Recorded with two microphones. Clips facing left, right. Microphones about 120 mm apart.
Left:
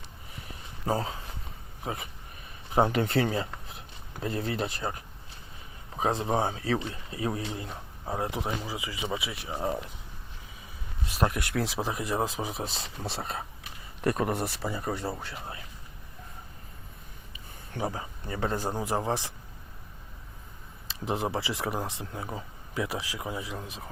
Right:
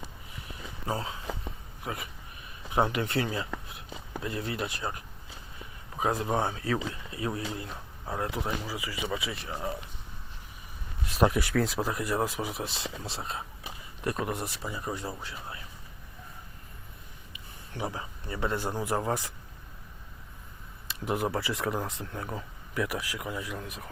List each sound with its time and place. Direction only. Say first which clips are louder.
0.9 s speech: left 3 dB; 35° left (ahead or behind); by 9.3 s 15° left (ahead or behind)
9.6 s speech: left 7 dB; 40° left (ahead or behind)
11.2 s speech: right 4 dB; 5° right (ahead or behind)
11.8 s speech: even; 20° left (ahead or behind)
12.6 s speech: right 1 dB; 40° left (ahead or behind)
13.1 s speech: left 2 dB; 55° left (ahead or behind)
17.3 s speech: left 2 dB; 35° left (ahead or behind)
18.7 s speech: even; 25° left (ahead or behind)
21.0 s speech: even; 30° left (ahead or behind)